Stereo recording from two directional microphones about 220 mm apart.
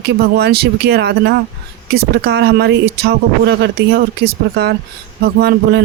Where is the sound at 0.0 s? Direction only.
45° right (ahead or behind).